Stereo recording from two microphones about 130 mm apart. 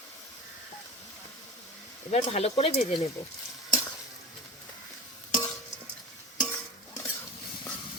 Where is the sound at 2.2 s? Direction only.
50° left (ahead or behind).